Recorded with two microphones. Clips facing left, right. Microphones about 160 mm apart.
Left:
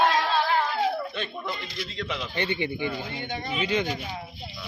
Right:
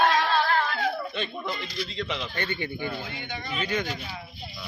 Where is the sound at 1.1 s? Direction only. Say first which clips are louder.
Right 1 dB; centre (ahead or behind).